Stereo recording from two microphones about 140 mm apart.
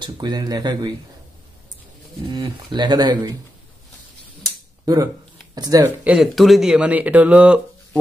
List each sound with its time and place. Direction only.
0.0 s speech: 30° right (ahead or behind)
2.3 s speech: 30° right (ahead or behind)
4.8 s speech: 25° right (ahead or behind)
6.0 s speech: centre (ahead or behind)